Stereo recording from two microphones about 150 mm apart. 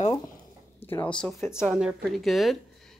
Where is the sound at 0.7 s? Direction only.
15° left (ahead or behind).